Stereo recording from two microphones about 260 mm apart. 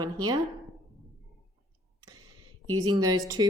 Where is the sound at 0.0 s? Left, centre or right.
Centre.